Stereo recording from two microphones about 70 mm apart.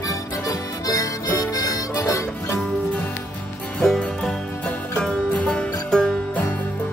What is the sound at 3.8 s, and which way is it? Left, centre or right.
Music, centre.